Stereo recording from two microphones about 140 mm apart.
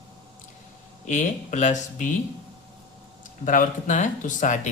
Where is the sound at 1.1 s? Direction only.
60° left (ahead or behind).